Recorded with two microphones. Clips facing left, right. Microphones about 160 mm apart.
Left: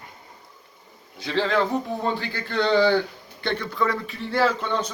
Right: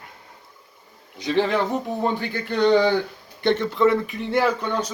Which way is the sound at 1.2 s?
15° right (ahead or behind).